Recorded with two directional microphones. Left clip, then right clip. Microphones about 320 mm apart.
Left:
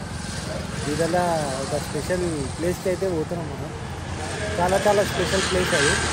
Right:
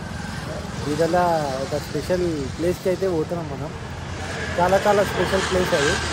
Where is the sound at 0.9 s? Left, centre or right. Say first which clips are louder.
Right 3 dB; centre.